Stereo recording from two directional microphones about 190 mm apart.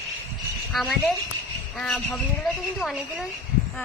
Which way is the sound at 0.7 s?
Centre (ahead or behind).